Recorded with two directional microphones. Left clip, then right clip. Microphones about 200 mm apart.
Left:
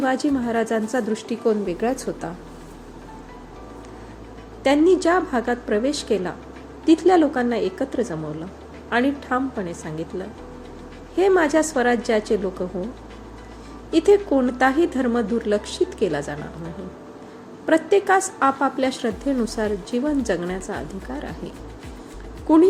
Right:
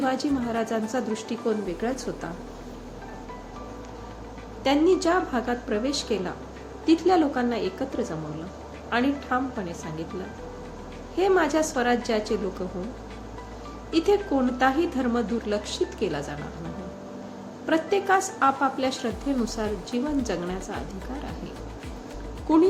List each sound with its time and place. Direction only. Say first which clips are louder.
0.0 s a woman's voice: left 4 dB; 25° left (ahead or behind)
4.6 s a woman's voice: left 4 dB; 25° left (ahead or behind)
11.2 s a woman's voice: left 4 dB; 25° left (ahead or behind)
13.9 s a woman's voice: left 6 dB; 25° left (ahead or behind)
17.7 s a woman's voice: left 5 dB; 25° left (ahead or behind)